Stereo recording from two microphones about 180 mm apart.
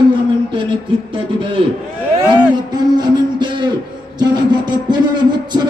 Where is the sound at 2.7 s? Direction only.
25° right (ahead or behind).